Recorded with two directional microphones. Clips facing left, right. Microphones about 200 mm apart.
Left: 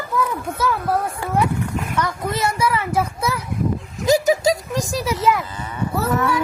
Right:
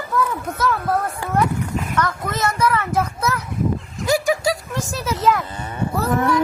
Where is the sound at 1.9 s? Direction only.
10° left (ahead or behind).